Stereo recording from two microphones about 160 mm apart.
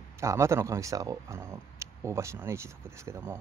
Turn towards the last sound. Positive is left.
turn(degrees=-15)  # may be behind; listen again after turning